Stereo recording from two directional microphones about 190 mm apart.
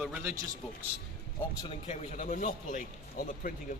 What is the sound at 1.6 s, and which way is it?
A man's voice, 30° left (ahead or behind).